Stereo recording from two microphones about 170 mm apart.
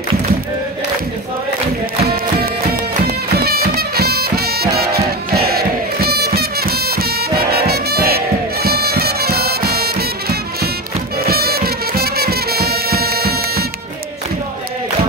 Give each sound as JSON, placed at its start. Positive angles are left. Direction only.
{"t": 3.3, "sound": "music", "side_deg": -65}
{"t": 11.2, "sound": "music", "side_deg": -65}